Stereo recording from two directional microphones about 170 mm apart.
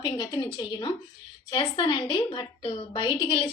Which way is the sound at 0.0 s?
25° left (ahead or behind).